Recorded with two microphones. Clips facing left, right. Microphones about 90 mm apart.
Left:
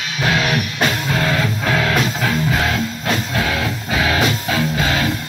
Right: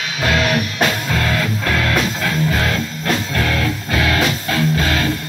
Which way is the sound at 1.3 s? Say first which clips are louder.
Left 1 dB; 10° left (ahead or behind).